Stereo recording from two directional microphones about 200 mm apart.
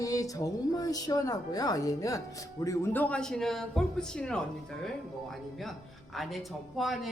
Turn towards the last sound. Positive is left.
turn(degrees=0)  # may be behind; listen again after turning